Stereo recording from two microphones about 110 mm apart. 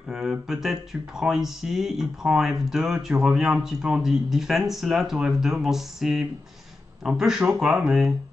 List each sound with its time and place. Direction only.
0.1 s speech: 5° right (ahead or behind)